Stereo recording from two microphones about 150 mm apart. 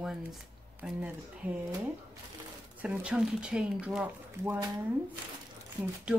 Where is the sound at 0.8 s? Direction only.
10° right (ahead or behind).